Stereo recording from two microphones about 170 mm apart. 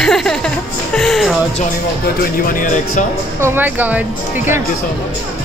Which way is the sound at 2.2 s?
55° left (ahead or behind).